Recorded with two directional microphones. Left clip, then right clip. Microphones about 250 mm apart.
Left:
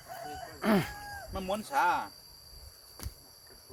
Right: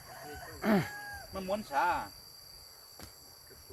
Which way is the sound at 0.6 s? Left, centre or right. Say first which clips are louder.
Left 2 dB; centre.